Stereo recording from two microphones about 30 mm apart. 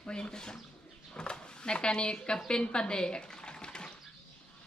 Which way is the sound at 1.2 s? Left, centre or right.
Left.